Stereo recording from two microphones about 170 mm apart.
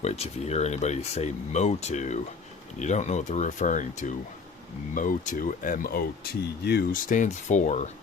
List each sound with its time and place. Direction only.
0.0 s speech: 40° left (ahead or behind)